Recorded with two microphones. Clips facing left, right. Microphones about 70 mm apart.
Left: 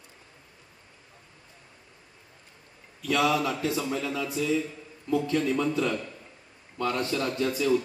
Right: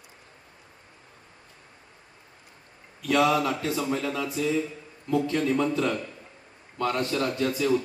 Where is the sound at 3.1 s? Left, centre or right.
Right.